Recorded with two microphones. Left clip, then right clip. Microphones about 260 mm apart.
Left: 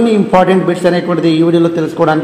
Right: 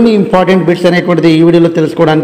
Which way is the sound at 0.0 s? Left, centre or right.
Right.